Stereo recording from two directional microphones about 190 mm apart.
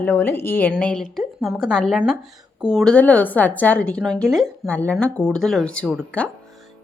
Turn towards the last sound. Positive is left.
turn(degrees=5)  # may be behind; listen again after turning